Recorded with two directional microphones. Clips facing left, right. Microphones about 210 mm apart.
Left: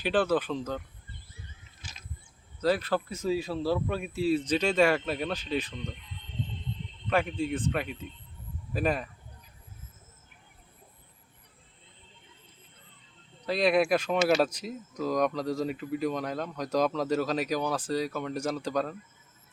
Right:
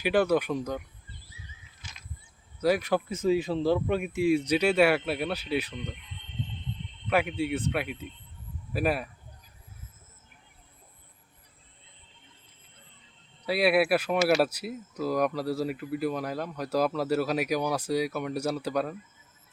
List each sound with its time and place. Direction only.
0.0 s speech: 10° right (ahead or behind)
1.1 s a sound: 55° left (ahead or behind)
2.6 s speech: 10° right (ahead or behind)
7.1 s speech: 10° right (ahead or behind)
13.4 s speech: 10° right (ahead or behind)